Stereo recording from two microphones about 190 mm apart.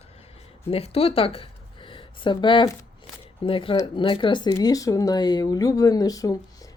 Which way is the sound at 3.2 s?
30° left (ahead or behind).